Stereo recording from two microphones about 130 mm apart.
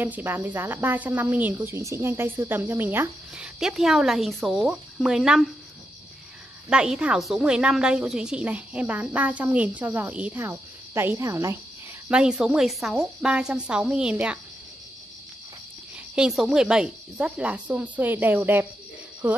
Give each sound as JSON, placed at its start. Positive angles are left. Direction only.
{"t": 0.0, "sound": "a woman's voice", "side_deg": -15}
{"t": 3.5, "sound": "a woman's voice", "side_deg": -5}
{"t": 6.7, "sound": "a woman's voice", "side_deg": -5}
{"t": 12.1, "sound": "a woman's voice", "side_deg": -5}
{"t": 16.2, "sound": "a woman's voice", "side_deg": -5}